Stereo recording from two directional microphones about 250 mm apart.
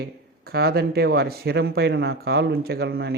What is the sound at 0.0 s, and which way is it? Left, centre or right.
Speech, right.